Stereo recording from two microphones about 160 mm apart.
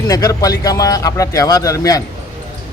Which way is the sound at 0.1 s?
20° left (ahead or behind).